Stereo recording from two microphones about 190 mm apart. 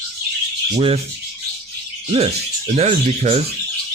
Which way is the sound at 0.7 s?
30° right (ahead or behind).